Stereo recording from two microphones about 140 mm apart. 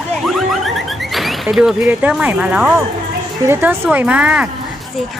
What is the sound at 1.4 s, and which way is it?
Speech, 5° right (ahead or behind).